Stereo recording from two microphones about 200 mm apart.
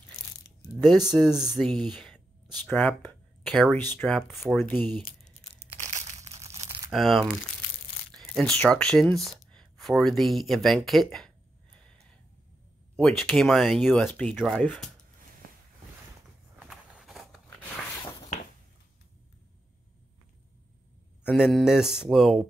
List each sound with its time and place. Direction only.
0.1 s crumpling: 15° left (ahead or behind)
0.8 s mantra: centre (ahead or behind)
1.6 s speech: centre (ahead or behind)
5.8 s crushing: 35° right (ahead or behind)
6.9 s mantra: centre (ahead or behind)
8.1 s speech: centre (ahead or behind)
12.9 s mantra: centre (ahead or behind)
14.0 s speech: 10° left (ahead or behind)
16.5 s walk: 5° right (ahead or behind)
21.3 s mantra: centre (ahead or behind)